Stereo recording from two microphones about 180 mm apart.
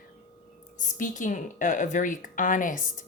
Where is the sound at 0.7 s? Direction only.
45° left (ahead or behind).